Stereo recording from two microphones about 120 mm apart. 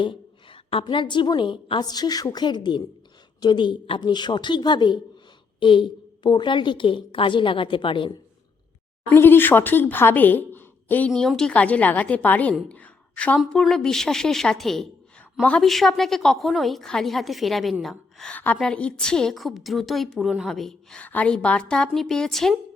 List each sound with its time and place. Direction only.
0.0 s a woman's voice: 45° left (ahead or behind)
9.0 s speech: 15° left (ahead or behind)
11.1 s a woman's voice: 5° left (ahead or behind)
12.6 s a sound: 10° left (ahead or behind)
13.4 s a woman's voice: 5° left (ahead or behind)